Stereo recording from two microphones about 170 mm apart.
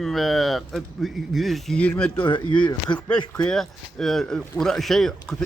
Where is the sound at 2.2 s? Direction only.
30° left (ahead or behind).